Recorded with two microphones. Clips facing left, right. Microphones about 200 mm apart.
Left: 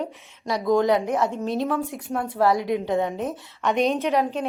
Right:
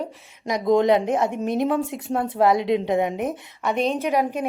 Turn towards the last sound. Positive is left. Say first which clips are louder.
# right 1 dB
turn(degrees=-15)  # may be behind; listen again after turning